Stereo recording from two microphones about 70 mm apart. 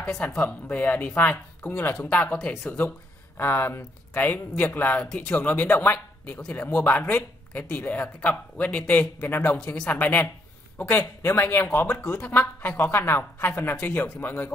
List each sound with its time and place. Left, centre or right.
0.4 s speech: left
3.3 s speech: left
4.9 s speech: centre
9.6 s speech: centre
9.9 s speech: left